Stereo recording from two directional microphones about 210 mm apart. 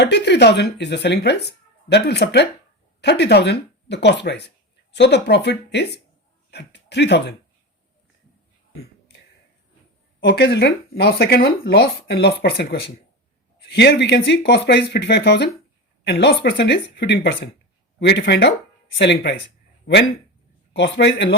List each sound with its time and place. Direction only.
0.0 s speech: 55° left (ahead or behind)
10.2 s a man's voice: 55° left (ahead or behind)
20.7 s a man's voice: 55° left (ahead or behind)